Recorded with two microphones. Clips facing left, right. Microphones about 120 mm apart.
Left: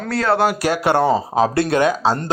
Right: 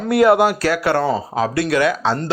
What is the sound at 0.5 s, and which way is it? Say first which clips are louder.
Speech: left 1 dB; 20° left (ahead or behind).